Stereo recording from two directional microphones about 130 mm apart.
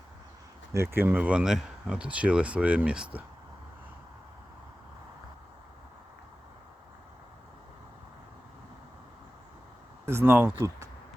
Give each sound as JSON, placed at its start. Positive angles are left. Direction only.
{"t": 0.7, "sound": "speech", "side_deg": -20}
{"t": 10.1, "sound": "speech", "side_deg": -20}